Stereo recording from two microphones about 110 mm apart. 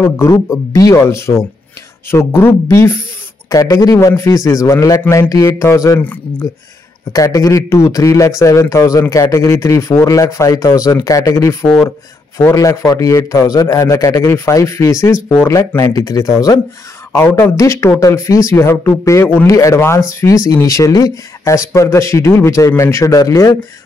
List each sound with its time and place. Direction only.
0.0 s a man's voice: 25° left (ahead or behind)
5.9 s speech: 15° left (ahead or behind)
7.1 s a man's voice: 30° left (ahead or behind)
12.5 s a man's voice: 35° left (ahead or behind)